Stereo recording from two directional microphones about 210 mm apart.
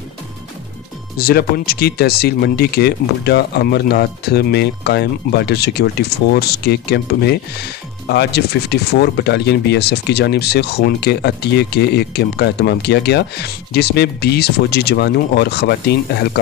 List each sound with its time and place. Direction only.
1.1 s speech: 45° left (ahead or behind)